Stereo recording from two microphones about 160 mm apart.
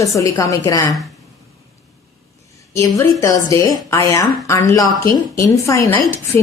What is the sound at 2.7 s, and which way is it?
A woman's voice, 20° left (ahead or behind).